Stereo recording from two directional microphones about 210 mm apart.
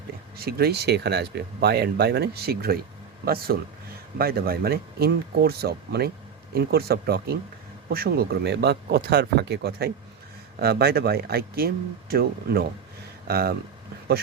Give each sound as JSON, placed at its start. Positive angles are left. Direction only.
{"t": 0.3, "sound": "speech", "side_deg": -45}